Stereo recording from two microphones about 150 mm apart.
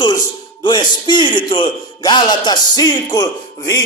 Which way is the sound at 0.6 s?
30° left (ahead or behind).